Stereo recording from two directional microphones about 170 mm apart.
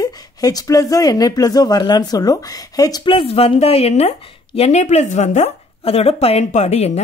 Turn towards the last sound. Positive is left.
turn(degrees=40)  # may be behind; listen again after turning